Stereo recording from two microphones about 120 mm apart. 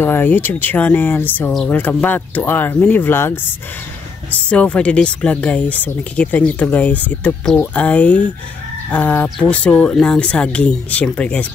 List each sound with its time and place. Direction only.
0.0 s speech: 15° left (ahead or behind)
4.5 s speech: 10° left (ahead or behind)